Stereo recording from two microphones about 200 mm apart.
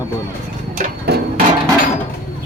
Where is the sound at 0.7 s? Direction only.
50° right (ahead or behind).